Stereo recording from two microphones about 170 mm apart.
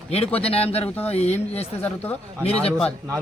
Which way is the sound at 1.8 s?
10° left (ahead or behind).